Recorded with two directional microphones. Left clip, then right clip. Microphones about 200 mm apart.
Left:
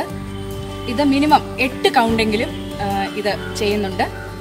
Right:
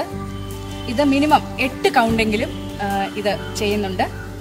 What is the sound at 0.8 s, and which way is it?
A woman's voice, 15° right (ahead or behind).